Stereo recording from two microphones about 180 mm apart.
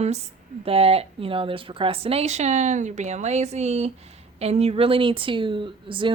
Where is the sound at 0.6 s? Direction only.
35° right (ahead or behind).